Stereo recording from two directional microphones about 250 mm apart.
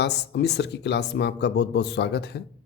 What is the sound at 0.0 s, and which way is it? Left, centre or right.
Speech, left.